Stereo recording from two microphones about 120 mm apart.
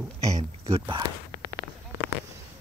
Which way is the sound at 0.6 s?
45° right (ahead or behind).